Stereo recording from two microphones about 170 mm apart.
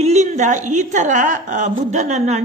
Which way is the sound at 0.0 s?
40° right (ahead or behind).